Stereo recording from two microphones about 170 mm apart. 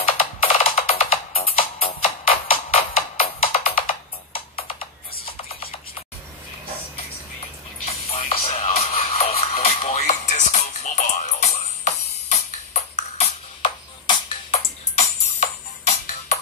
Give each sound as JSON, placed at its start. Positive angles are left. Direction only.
{"t": 0.7, "sound": "music", "side_deg": 35}
{"t": 7.8, "sound": "music", "side_deg": 35}